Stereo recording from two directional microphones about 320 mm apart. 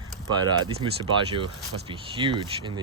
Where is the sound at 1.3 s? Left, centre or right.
Centre.